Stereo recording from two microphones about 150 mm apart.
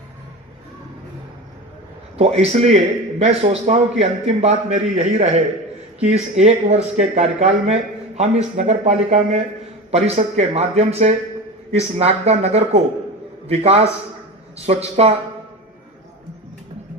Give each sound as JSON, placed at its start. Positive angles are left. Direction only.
{"t": 2.1, "sound": "speech", "side_deg": -45}